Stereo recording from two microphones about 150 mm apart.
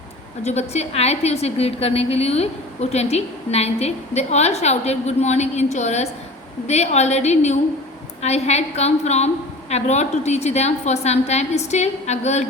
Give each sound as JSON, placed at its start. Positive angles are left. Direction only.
{"t": 0.4, "sound": "a woman's voice", "side_deg": 45}